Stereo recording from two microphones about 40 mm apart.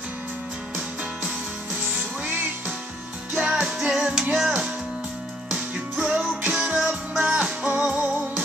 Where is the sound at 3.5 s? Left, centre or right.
Centre.